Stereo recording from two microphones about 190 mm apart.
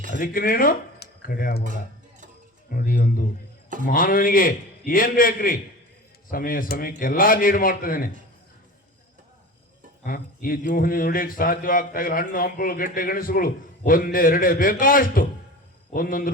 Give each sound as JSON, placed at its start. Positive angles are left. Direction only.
{"t": 0.2, "sound": "speech", "side_deg": 50}
{"t": 2.6, "sound": "speech", "side_deg": 50}
{"t": 10.0, "sound": "speech", "side_deg": 50}